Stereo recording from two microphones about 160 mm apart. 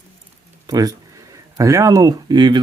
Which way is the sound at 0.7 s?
20° right (ahead or behind).